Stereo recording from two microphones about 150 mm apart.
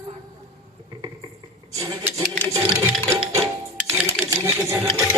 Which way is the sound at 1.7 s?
20° right (ahead or behind).